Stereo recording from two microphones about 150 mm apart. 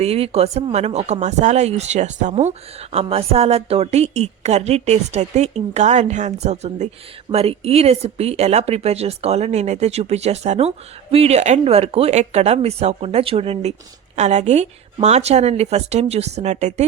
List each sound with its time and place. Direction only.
0.0 s speech: 45° right (ahead or behind)